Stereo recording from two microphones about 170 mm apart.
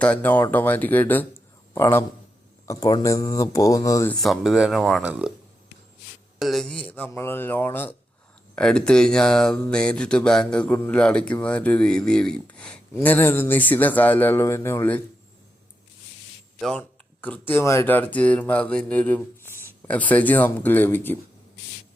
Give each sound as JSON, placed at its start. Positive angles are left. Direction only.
{"t": 0.0, "sound": "speech", "side_deg": 10}
{"t": 4.1, "sound": "speech", "side_deg": 0}
{"t": 6.4, "sound": "speech", "side_deg": 0}
{"t": 16.6, "sound": "speech", "side_deg": 5}